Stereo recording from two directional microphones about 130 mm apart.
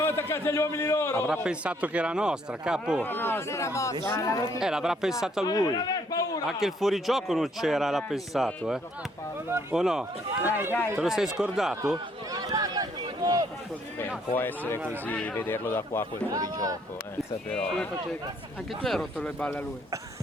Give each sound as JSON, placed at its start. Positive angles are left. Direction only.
{"t": 0.0, "sound": "a man's voice", "side_deg": 20}
{"t": 1.3, "sound": "speech", "side_deg": -10}
{"t": 3.0, "sound": "a man's voice", "side_deg": 15}
{"t": 4.6, "sound": "a man's voice", "side_deg": -5}
{"t": 5.5, "sound": "a man's voice", "side_deg": 30}
{"t": 6.6, "sound": "a man's voice", "side_deg": 0}
{"t": 10.4, "sound": "speech", "side_deg": -15}
{"t": 11.0, "sound": "a man's voice", "side_deg": 0}
{"t": 11.8, "sound": "a sound", "side_deg": -25}
{"t": 14.3, "sound": "speech", "side_deg": 15}
{"t": 16.3, "sound": "speech", "side_deg": -25}
{"t": 17.5, "sound": "a man's voice", "side_deg": 10}